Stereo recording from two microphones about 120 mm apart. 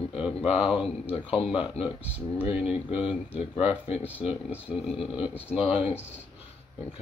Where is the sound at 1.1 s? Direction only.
50° left (ahead or behind).